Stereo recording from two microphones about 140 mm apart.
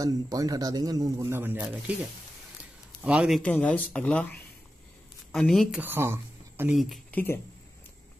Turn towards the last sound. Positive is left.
turn(degrees=10)  # may be behind; listen again after turning